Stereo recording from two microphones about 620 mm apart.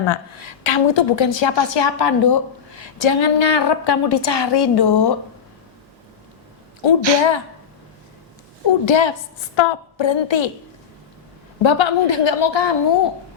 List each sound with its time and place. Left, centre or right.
0.0 s a woman's voice: left
6.8 s a woman's voice: left
8.9 s a woman's voice: left
11.6 s a woman's voice: left